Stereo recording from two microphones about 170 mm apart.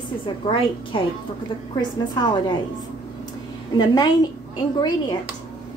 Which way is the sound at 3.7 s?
25° left (ahead or behind).